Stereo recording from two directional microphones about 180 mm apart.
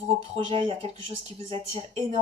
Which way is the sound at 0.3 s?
25° right (ahead or behind).